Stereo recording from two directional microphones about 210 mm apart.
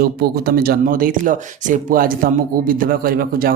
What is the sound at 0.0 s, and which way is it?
Speech, 45° right (ahead or behind).